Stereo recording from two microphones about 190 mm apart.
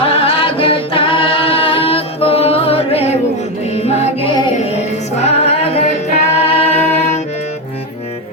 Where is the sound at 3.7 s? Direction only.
35° left (ahead or behind).